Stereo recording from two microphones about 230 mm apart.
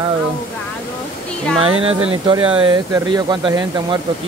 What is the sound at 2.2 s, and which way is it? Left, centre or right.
Speech, right.